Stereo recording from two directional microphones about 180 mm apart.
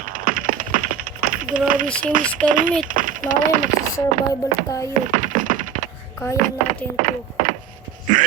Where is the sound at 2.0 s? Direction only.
45° right (ahead or behind).